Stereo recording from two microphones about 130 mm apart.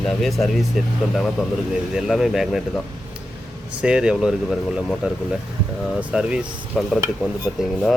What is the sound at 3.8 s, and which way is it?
Speech, 5° right (ahead or behind).